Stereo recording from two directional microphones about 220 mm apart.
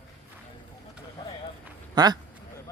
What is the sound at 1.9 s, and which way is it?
Speech, 20° right (ahead or behind).